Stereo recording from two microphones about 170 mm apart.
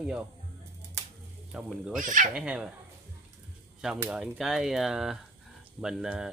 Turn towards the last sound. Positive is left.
turn(degrees=-5)  # may be behind; listen again after turning